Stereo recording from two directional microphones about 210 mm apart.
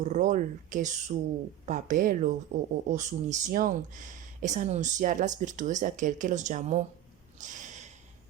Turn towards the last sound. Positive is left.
turn(degrees=-35)  # may be behind; listen again after turning